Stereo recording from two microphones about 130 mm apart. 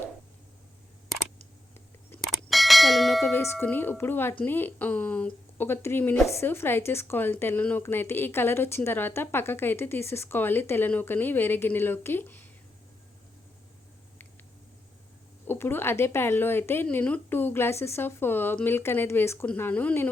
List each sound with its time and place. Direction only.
2.2 s bell: centre (ahead or behind)
3.3 s a woman's voice: 20° left (ahead or behind)
15.4 s a woman's voice: 15° left (ahead or behind)